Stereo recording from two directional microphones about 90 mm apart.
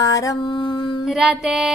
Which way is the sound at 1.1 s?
10° right (ahead or behind).